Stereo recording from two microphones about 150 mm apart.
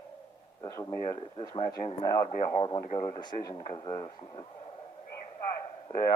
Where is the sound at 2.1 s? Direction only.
20° left (ahead or behind).